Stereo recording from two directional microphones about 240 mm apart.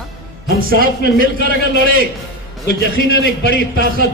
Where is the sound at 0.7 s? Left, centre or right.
Right.